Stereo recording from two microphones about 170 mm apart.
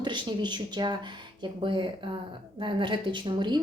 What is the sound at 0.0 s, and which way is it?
A woman's voice, 25° right (ahead or behind).